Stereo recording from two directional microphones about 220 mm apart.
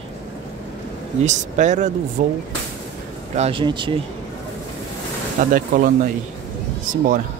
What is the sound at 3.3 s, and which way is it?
Speech, 25° right (ahead or behind).